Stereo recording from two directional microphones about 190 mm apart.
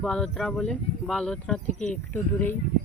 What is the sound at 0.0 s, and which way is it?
Speech, centre (ahead or behind).